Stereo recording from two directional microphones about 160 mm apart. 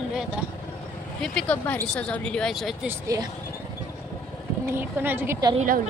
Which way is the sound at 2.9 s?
20° right (ahead or behind).